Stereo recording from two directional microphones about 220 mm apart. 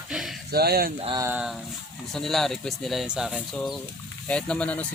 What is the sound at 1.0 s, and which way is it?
Speech, 20° right (ahead or behind).